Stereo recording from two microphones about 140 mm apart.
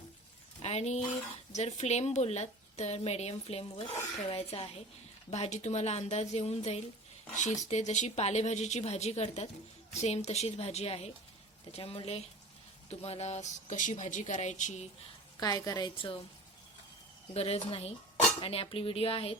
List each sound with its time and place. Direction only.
0.6 s a woman's voice: 50° left (ahead or behind)
15.4 s a woman's voice: 25° left (ahead or behind)
16.0 s speech: 35° left (ahead or behind)
17.3 s a woman's voice: 45° left (ahead or behind)